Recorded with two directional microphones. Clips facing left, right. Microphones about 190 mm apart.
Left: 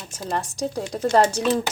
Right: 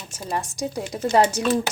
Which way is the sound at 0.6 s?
10° right (ahead or behind).